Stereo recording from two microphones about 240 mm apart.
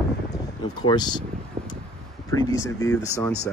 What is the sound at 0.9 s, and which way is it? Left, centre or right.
Speech, centre.